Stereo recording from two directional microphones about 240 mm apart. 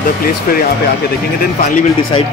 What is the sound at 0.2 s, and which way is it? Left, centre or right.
Speech, left.